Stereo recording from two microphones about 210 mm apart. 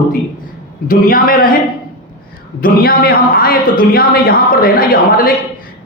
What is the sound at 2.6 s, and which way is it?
A man's voice, 45° left (ahead or behind).